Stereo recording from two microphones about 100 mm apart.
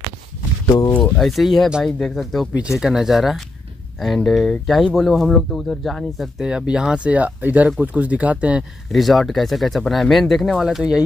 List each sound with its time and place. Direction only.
0.7 s speech: 40° left (ahead or behind)
0.9 s a sound: 10° left (ahead or behind)
1.2 s speech: centre (ahead or behind)
8.9 s speech: centre (ahead or behind)